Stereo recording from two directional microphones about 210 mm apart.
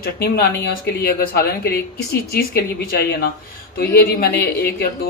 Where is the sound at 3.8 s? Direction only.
50° left (ahead or behind).